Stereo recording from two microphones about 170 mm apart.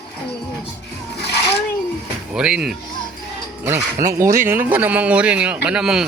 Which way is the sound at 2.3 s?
5° right (ahead or behind).